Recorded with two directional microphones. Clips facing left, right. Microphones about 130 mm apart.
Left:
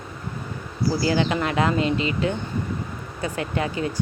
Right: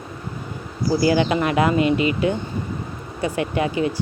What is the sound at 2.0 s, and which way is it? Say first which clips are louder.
Speech: right 4 dB; 30° left (ahead or behind).